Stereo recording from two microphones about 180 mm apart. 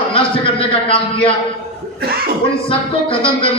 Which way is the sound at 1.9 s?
60° right (ahead or behind).